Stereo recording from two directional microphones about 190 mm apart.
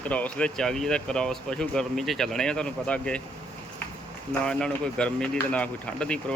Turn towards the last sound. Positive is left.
turn(degrees=5)  # may be behind; listen again after turning